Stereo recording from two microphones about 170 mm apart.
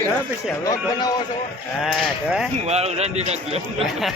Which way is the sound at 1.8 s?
Centre (ahead or behind).